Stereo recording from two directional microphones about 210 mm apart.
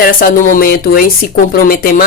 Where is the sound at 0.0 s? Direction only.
45° left (ahead or behind).